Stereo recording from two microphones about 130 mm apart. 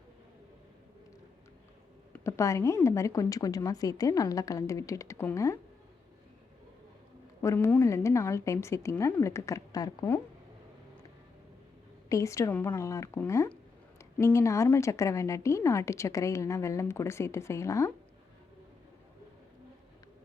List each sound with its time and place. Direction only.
2.2 s a woman's voice: 25° left (ahead or behind)
7.4 s a woman's voice: 20° left (ahead or behind)
12.0 s a woman's voice: 25° left (ahead or behind)